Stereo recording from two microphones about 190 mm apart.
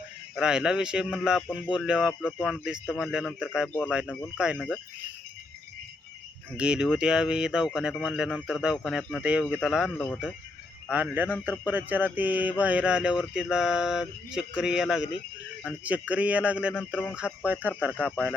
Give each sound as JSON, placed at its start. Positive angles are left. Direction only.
{"t": 0.3, "sound": "speech", "side_deg": -5}
{"t": 3.7, "sound": "speech", "side_deg": 5}
{"t": 4.4, "sound": "speech", "side_deg": -5}
{"t": 6.6, "sound": "speech", "side_deg": -5}
{"t": 10.8, "sound": "a sound", "side_deg": -5}
{"t": 13.3, "sound": "speech", "side_deg": -5}
{"t": 15.6, "sound": "a sound", "side_deg": -5}
{"t": 18.0, "sound": "speech", "side_deg": -5}